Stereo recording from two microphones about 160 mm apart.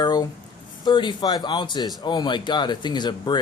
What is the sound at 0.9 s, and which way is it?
Speech, 30° left (ahead or behind).